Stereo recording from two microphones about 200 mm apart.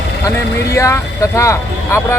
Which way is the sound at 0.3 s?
15° left (ahead or behind).